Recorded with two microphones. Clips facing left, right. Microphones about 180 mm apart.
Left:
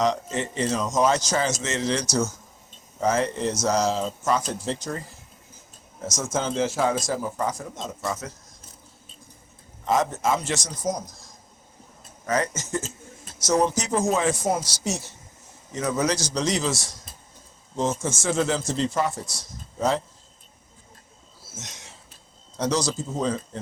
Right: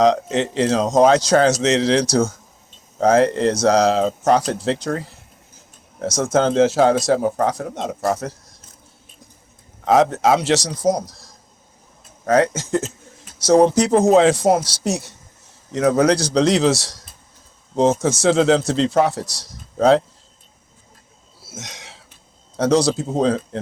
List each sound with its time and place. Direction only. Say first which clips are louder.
0.0 s a man's voice: right 8 dB; 85° right; by 2.3 s 60° right (ahead or behind)
3.0 s a man's voice: right 9 dB; 70° right (ahead or behind)
6.1 s a man's voice: right 10 dB; 65° right (ahead or behind)
9.8 s a man's voice: right 8 dB; 70° right (ahead or behind)
12.2 s speech: right 9 dB; 60° right (ahead or behind)
13.4 s speech: right 9 dB; 30° right (ahead or behind)
14.1 s a man's voice: right 10 dB; 75° right (ahead or behind)
18.0 s a man's voice: right 9 dB; 70° right (ahead or behind)
21.4 s a sound: right 6 dB; 80° right
22.5 s speech: right 8 dB; 55° right (ahead or behind)
23.2 s a man's voice: right 8 dB; 75° right (ahead or behind)